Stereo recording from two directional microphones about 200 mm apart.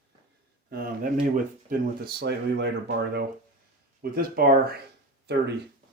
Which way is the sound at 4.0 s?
50° right (ahead or behind).